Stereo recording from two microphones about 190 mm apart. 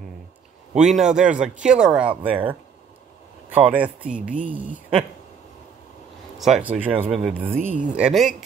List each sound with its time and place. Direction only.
0.7 s a man's voice: 5° right (ahead or behind)
6.3 s a man's voice: centre (ahead or behind)